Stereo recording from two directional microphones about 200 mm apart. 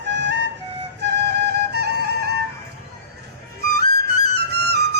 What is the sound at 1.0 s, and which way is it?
Music, 55° right (ahead or behind).